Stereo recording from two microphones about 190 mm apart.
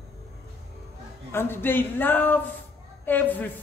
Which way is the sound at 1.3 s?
10° left (ahead or behind).